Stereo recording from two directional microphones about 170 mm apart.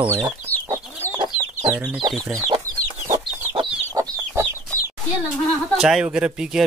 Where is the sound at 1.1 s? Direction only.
25° right (ahead or behind).